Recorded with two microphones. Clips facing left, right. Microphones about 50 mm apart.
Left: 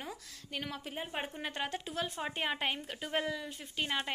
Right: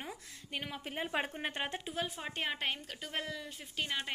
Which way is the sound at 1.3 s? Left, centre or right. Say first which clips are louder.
Even; right.